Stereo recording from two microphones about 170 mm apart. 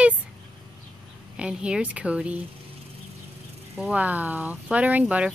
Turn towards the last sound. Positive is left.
turn(degrees=-5)  # may be behind; listen again after turning